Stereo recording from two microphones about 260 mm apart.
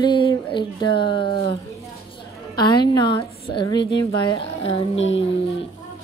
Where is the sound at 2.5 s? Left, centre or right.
Centre.